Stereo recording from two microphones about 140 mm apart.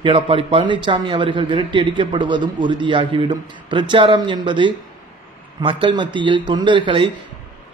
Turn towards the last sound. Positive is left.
turn(degrees=-35)  # may be behind; listen again after turning